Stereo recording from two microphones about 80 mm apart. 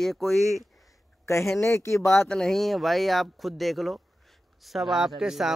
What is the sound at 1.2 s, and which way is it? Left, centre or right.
Speech, left.